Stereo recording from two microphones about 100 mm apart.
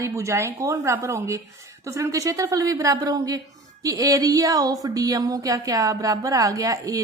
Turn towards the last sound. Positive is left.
turn(degrees=-35)  # may be behind; listen again after turning